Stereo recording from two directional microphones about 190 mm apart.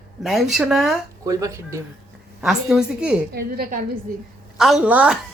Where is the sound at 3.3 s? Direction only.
50° right (ahead or behind).